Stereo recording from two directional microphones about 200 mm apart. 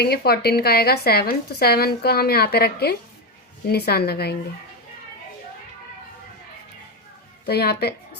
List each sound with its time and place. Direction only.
0.0 s speech: 50° left (ahead or behind)
7.4 s a woman's voice: 55° left (ahead or behind)